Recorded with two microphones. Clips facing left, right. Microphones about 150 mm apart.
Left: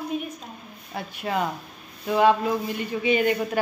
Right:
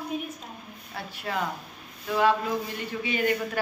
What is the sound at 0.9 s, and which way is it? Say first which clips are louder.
A woman's voice: left 4 dB; 20° left (ahead or behind).